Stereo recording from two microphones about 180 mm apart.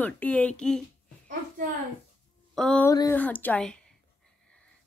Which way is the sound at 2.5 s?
5° left (ahead or behind).